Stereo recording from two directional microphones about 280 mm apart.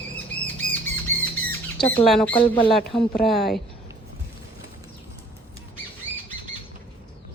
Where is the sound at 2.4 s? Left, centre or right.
Centre.